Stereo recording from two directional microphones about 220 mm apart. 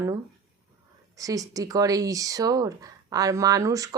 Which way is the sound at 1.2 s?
15° right (ahead or behind).